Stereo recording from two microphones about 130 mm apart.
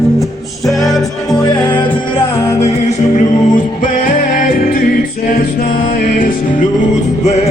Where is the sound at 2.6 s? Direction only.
60° left (ahead or behind); by 6.7 s 90° left.